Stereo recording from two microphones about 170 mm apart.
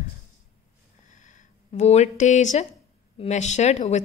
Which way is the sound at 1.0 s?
45° left (ahead or behind).